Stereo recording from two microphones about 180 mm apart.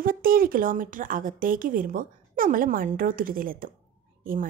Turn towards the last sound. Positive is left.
turn(degrees=-50)  # may be behind; listen again after turning